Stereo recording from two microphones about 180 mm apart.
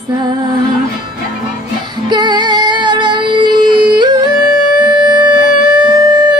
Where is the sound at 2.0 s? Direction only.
25° right (ahead or behind).